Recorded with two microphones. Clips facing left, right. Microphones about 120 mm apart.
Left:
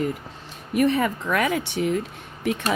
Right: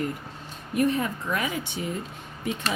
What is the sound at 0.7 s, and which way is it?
Speech, 80° left.